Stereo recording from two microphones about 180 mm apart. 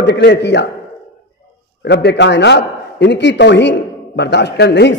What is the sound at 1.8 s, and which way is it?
A man's voice, 70° left (ahead or behind).